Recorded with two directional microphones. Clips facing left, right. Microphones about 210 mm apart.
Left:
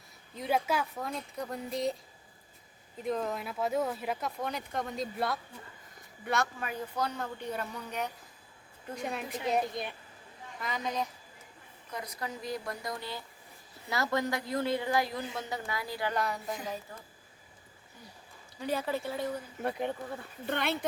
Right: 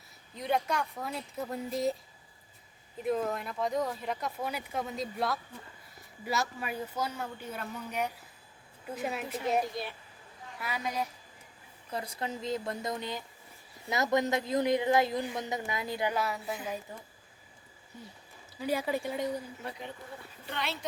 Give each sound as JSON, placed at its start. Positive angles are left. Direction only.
{"t": 0.3, "sound": "speech", "side_deg": 5}
{"t": 3.0, "sound": "speech", "side_deg": -5}
{"t": 9.7, "sound": "speech", "side_deg": 20}
{"t": 10.6, "sound": "speech", "side_deg": -10}
{"t": 11.9, "sound": "speech", "side_deg": -30}
{"t": 16.1, "sound": "speech", "side_deg": -5}
{"t": 18.6, "sound": "speech", "side_deg": -10}
{"t": 19.6, "sound": "speech", "side_deg": 55}